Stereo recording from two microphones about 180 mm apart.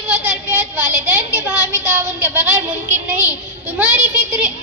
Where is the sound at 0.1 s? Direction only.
10° right (ahead or behind).